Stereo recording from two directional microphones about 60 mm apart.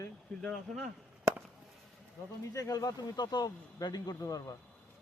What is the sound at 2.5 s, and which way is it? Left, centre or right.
Speech, left.